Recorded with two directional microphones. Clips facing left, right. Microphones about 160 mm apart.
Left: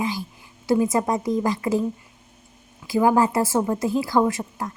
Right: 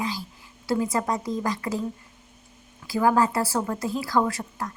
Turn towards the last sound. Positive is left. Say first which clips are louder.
# left 4 dB
turn(degrees=20)  # may be behind; listen again after turning